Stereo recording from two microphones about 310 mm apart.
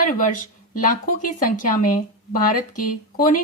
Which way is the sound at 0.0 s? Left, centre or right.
Left.